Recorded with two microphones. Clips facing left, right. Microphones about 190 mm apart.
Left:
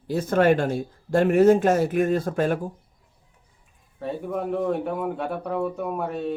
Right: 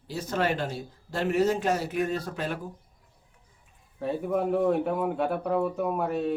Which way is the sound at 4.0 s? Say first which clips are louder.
Right 1 dB; centre (ahead or behind).